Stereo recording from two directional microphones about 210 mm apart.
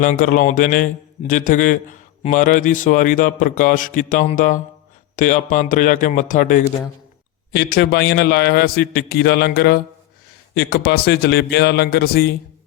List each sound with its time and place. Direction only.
0.0 s a man's voice: 40° left (ahead or behind)